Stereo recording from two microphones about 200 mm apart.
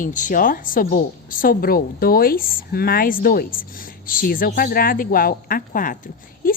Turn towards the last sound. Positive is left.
turn(degrees=45)  # may be behind; listen again after turning